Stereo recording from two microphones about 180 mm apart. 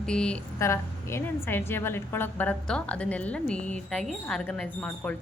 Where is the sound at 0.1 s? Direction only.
5° left (ahead or behind).